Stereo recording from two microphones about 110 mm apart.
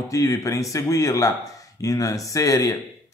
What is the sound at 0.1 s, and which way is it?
A man's voice, 30° left (ahead or behind).